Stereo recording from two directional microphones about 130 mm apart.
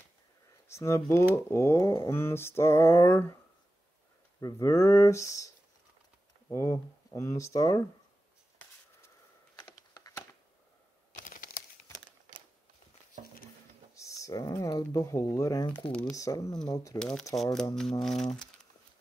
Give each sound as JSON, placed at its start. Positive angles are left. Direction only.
{"t": 0.7, "sound": "speech", "side_deg": 20}
{"t": 1.3, "sound": "mantra", "side_deg": 20}
{"t": 4.4, "sound": "mantra", "side_deg": 25}
{"t": 6.5, "sound": "mantra", "side_deg": 25}
{"t": 9.9, "sound": "a sound", "side_deg": 25}
{"t": 11.1, "sound": "computer keyboard", "side_deg": 80}
{"t": 13.9, "sound": "speech", "side_deg": 25}
{"t": 16.1, "sound": "mantra", "side_deg": 25}
{"t": 17.0, "sound": "music", "side_deg": 5}